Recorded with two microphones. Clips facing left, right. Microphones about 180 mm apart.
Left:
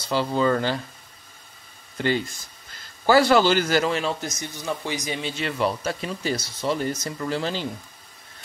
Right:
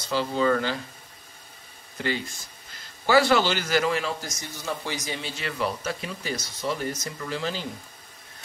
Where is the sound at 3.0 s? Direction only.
40° left (ahead or behind).